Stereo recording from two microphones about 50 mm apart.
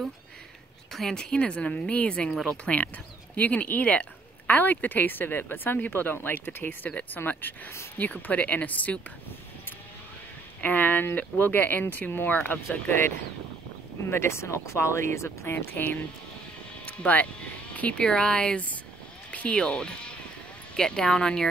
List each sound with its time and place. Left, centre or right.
0.9 s a woman's voice: centre; by 4.6 s left
4.6 s a woman's voice: left
10.6 s speech: left
14.0 s speech: left
15.7 s speech: left
16.8 s a sound: left
17.9 s a woman's voice: centre